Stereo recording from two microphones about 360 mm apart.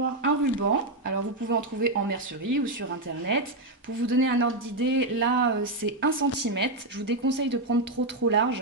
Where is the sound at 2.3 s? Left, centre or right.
Right.